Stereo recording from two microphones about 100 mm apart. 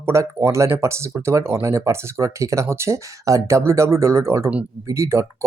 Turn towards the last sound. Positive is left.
turn(degrees=-30)  # may be behind; listen again after turning